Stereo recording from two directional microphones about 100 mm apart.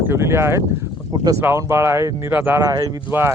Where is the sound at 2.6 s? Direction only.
40° right (ahead or behind).